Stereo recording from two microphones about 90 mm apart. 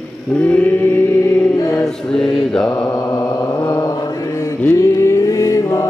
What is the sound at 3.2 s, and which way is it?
Mantra, 30° left (ahead or behind).